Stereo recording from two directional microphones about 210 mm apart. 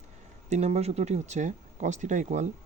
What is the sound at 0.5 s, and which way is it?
Speech, 30° right (ahead or behind).